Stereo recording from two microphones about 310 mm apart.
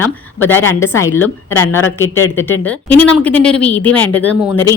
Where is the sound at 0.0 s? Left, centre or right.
Centre.